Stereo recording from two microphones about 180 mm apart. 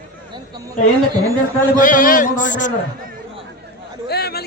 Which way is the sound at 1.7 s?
50° left (ahead or behind).